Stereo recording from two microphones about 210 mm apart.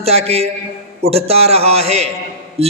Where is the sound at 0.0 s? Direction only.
30° right (ahead or behind).